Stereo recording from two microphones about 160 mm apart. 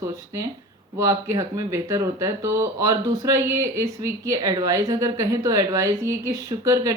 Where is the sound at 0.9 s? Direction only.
20° right (ahead or behind).